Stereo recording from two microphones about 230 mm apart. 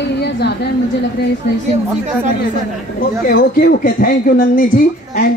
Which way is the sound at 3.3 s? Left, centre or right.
Left.